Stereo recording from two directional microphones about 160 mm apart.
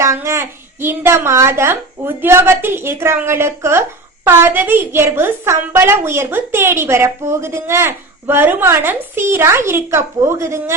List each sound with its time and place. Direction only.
0.0 s a child's voice: 20° right (ahead or behind)